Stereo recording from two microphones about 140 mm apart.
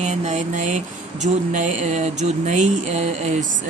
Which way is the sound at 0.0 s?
55° right (ahead or behind).